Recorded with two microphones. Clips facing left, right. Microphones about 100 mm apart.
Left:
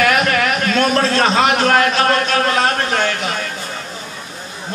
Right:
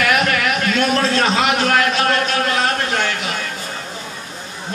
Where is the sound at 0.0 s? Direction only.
45° left (ahead or behind).